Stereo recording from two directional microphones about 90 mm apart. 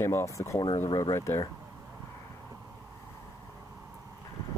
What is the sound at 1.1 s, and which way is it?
Speech, 30° left (ahead or behind).